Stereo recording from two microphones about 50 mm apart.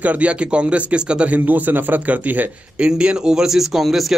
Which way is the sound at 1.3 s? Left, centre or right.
Right.